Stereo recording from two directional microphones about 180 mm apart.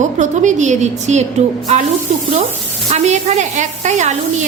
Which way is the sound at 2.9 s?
40° right (ahead or behind).